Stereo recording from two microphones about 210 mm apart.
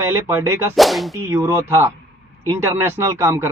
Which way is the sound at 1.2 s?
10° right (ahead or behind).